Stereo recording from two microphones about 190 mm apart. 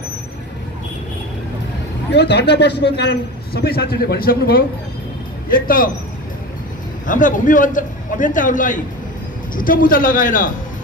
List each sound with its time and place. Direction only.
2.1 s a man's voice: 65° left (ahead or behind); by 5.9 s 45° left (ahead or behind)
7.1 s a man's voice: 45° left (ahead or behind)